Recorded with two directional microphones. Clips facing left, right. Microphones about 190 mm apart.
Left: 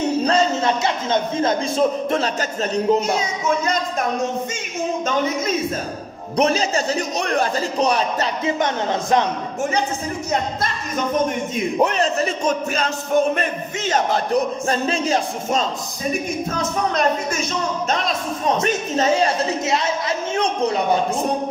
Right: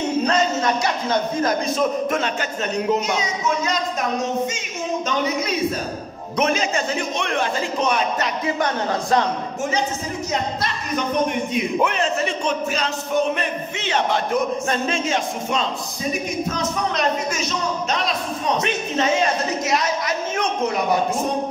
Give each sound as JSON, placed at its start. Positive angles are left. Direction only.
{"t": 0.2, "sound": "a man's voice", "side_deg": 30}
{"t": 6.3, "sound": "speech", "side_deg": 35}
{"t": 8.5, "sound": "speech", "side_deg": 20}
{"t": 11.5, "sound": "speech", "side_deg": 40}
{"t": 16.9, "sound": "a woman's voice", "side_deg": 50}
{"t": 18.6, "sound": "speech", "side_deg": 40}